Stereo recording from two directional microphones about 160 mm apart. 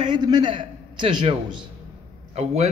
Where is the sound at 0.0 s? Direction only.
25° right (ahead or behind).